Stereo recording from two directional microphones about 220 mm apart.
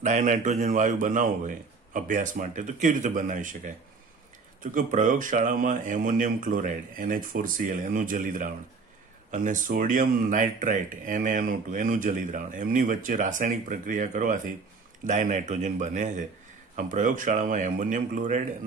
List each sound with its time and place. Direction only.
0.0 s speech: 35° right (ahead or behind)